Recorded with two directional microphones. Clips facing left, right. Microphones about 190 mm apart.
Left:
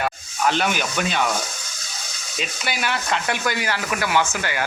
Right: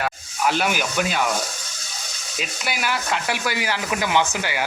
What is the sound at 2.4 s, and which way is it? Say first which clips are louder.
Speech: left 1 dB; 5° right (ahead or behind).